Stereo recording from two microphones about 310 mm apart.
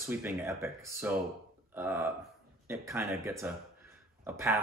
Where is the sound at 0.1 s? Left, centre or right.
Centre.